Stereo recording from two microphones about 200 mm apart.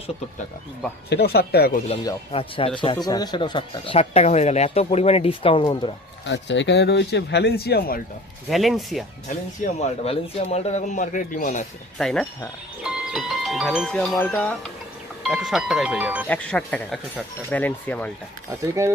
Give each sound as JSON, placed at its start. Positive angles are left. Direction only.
{"t": 1.1, "sound": "speech", "side_deg": 55}
{"t": 2.3, "sound": "speech", "side_deg": 30}
{"t": 6.2, "sound": "speech", "side_deg": 65}
{"t": 8.4, "sound": "speech", "side_deg": 0}
{"t": 9.6, "sound": "speech", "side_deg": 30}
{"t": 11.9, "sound": "speech", "side_deg": 0}
{"t": 15.2, "sound": "speech", "side_deg": 0}
{"t": 16.2, "sound": "speech", "side_deg": 5}
{"t": 18.6, "sound": "speech", "side_deg": -15}